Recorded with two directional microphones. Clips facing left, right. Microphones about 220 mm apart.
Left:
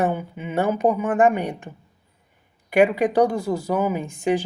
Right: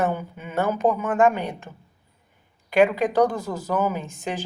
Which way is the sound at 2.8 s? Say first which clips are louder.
Left 1 dB; 15° left (ahead or behind).